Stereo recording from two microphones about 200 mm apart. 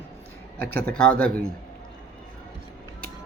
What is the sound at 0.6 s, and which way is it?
Speech, 50° right (ahead or behind).